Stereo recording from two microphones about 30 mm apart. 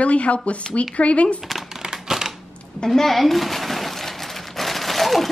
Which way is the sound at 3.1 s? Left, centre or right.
Centre.